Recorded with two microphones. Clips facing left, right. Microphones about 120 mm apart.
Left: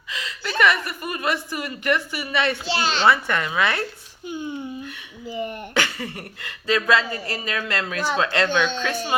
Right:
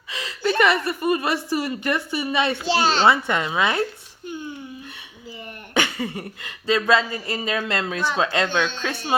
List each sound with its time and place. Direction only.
0.1 s chuckle: 30° right (ahead or behind)
0.6 s speech: 25° right (ahead or behind)
2.6 s a child's voice: 40° right (ahead or behind)
3.1 s speech: 20° right (ahead or behind)
5.7 s speech: 20° right (ahead or behind)